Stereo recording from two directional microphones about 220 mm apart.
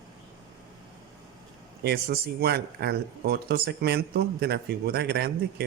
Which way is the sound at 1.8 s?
45° right (ahead or behind).